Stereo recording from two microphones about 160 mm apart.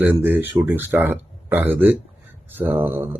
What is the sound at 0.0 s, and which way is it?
Speech, 10° right (ahead or behind).